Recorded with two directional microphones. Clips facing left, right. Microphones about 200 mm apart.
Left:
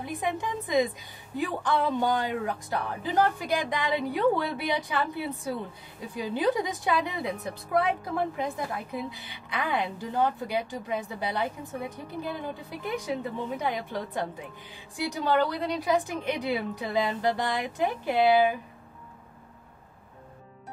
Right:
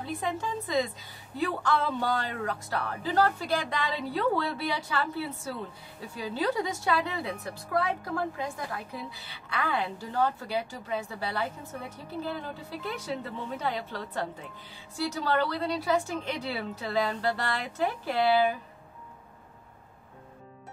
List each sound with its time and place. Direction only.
0.0 s a woman's voice: 15° left (ahead or behind)